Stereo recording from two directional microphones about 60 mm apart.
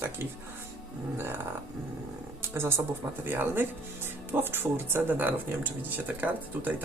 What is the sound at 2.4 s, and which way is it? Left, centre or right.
Speech, right.